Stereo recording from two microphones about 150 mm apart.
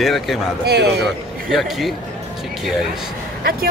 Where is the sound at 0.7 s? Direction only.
90° right.